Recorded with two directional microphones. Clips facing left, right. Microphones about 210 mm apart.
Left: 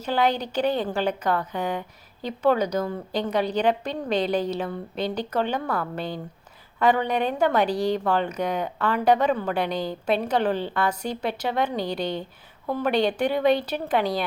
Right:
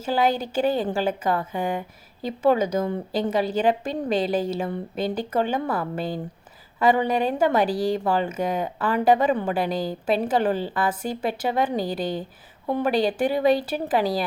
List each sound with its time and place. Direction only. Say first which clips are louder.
0.0 s speech: right 1 dB; 5° right (ahead or behind)
12.6 s a woman's voice: right 2 dB; 15° right (ahead or behind)
12.9 s speech: even; 5° right (ahead or behind)